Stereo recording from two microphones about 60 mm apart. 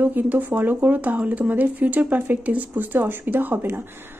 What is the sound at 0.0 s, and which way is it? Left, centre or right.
Speech, right.